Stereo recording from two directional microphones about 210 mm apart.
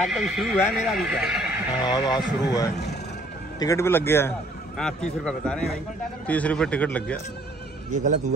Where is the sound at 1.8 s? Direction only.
20° left (ahead or behind).